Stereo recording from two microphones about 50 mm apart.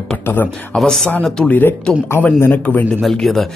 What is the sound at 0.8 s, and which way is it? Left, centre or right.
Speech, centre.